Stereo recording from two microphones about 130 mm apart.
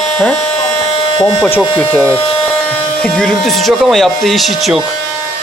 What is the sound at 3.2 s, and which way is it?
A man's voice, 5° left (ahead or behind).